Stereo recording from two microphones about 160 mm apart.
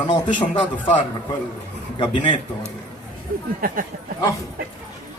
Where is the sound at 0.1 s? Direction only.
30° left (ahead or behind).